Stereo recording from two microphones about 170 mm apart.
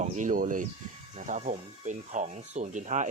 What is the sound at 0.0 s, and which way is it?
Speech, 50° right (ahead or behind).